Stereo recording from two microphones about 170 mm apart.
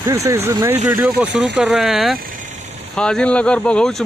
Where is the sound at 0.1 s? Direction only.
20° right (ahead or behind).